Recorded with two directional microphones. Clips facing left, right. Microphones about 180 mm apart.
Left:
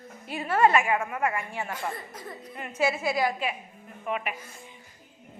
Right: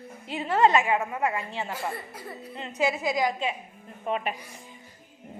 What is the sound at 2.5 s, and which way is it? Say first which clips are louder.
A woman's voice: even; 20° right (ahead or behind).